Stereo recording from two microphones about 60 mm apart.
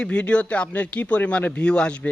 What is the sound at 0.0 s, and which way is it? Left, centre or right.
Speech, centre.